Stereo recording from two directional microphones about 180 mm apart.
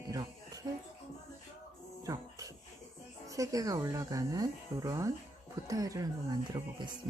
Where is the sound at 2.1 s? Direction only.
20° right (ahead or behind).